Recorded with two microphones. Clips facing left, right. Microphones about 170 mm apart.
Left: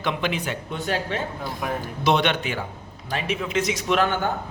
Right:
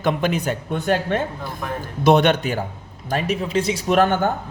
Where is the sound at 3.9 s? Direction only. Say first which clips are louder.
Right 5 dB; 45° right (ahead or behind).